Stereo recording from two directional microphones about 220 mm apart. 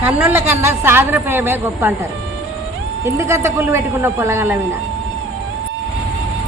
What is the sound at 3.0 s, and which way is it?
A woman's voice, 15° right (ahead or behind).